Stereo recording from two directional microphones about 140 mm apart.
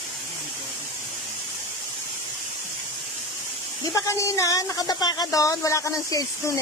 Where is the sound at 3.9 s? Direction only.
20° left (ahead or behind).